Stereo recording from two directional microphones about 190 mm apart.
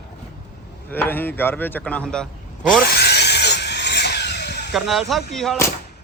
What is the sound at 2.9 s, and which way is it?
Vehicle, 60° left (ahead or behind).